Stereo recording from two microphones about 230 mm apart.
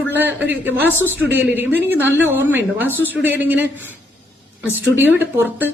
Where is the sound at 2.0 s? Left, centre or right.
Centre.